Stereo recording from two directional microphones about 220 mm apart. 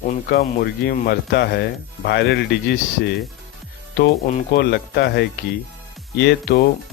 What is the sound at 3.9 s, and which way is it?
Speech, 45° left (ahead or behind).